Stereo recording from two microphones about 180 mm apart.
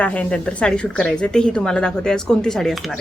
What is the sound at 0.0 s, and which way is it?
A woman's voice, 5° left (ahead or behind).